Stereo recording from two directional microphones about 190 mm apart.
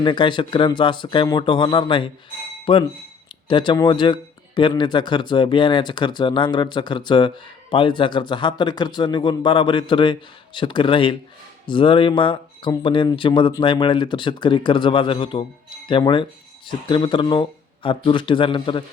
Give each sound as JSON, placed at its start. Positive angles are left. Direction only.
{"t": 0.0, "sound": "speech", "side_deg": 25}